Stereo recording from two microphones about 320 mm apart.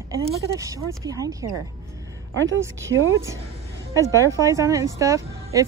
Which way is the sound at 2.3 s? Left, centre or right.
Right.